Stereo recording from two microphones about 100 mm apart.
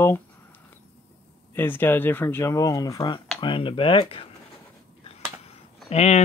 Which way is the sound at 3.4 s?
60° left (ahead or behind).